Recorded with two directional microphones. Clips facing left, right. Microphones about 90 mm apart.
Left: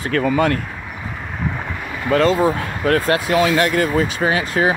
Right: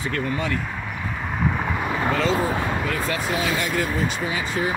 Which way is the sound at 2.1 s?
75° left (ahead or behind).